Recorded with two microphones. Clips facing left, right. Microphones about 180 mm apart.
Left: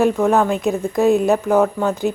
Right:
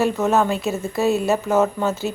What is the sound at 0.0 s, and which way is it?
Speech, 15° left (ahead or behind).